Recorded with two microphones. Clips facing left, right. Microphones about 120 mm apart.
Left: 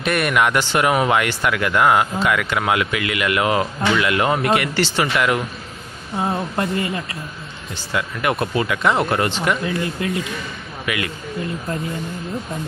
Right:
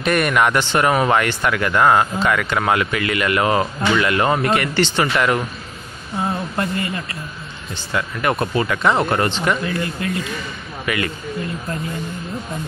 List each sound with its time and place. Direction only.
0.0 s speech: 5° left (ahead or behind)
6.1 s speech: 15° left (ahead or behind)
7.7 s speech: 5° left (ahead or behind)
9.8 s speech: 15° left (ahead or behind)
10.9 s speech: 5° left (ahead or behind)